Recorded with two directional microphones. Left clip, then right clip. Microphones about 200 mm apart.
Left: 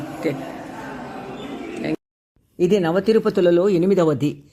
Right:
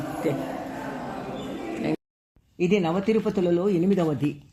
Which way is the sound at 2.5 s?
35° left (ahead or behind).